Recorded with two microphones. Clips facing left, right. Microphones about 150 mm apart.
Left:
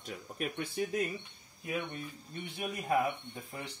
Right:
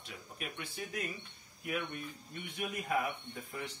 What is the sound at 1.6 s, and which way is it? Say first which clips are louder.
Speech: left 1 dB; 25° left (ahead or behind).